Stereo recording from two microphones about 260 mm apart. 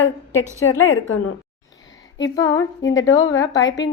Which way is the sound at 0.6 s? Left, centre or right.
Left.